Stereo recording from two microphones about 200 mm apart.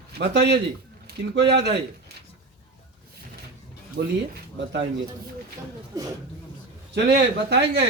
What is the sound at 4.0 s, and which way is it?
Speech, 55° right (ahead or behind).